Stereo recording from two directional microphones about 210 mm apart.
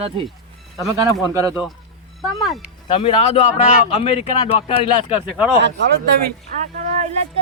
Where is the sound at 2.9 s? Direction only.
25° left (ahead or behind).